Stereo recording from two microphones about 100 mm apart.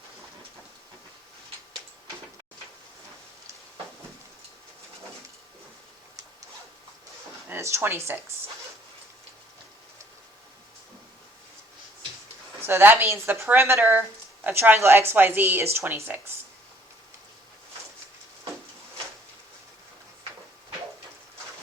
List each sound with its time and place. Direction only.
7.5 s speech: 25° right (ahead or behind)
12.6 s speech: 20° right (ahead or behind)